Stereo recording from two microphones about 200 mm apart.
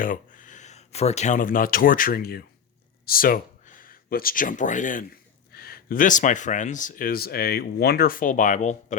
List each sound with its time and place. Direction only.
0.0 s speech: 40° left (ahead or behind)